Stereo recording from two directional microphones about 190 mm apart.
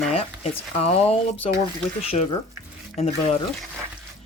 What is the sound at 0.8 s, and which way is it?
Speech, 30° left (ahead or behind).